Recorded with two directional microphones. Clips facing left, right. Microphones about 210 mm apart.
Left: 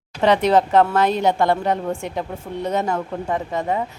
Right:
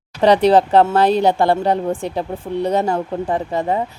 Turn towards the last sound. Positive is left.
turn(degrees=-35)  # may be behind; listen again after turning